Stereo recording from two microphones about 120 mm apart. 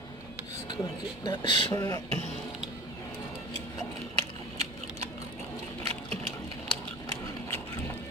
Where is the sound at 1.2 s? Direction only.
40° left (ahead or behind).